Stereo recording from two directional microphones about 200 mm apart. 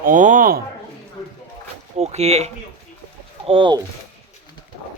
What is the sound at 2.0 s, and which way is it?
Speech, 30° right (ahead or behind).